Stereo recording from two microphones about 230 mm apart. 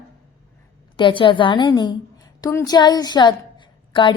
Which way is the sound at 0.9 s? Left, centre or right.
Left.